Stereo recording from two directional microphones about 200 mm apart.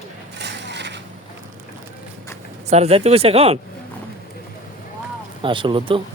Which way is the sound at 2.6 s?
30° right (ahead or behind).